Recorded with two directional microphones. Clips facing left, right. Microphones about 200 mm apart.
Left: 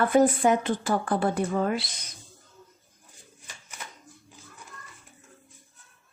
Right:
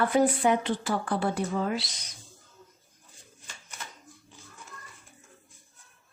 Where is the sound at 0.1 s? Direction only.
45° left (ahead or behind).